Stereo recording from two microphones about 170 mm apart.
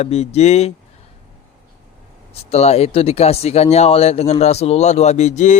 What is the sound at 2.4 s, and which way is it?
Speech, 40° left (ahead or behind).